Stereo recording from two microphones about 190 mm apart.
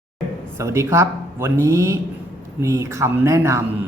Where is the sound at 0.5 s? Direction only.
15° right (ahead or behind).